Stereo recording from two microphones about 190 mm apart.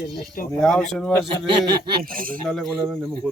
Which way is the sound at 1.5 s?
25° right (ahead or behind).